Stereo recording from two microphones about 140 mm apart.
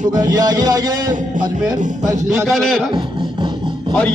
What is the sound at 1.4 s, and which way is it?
Music, 30° right (ahead or behind).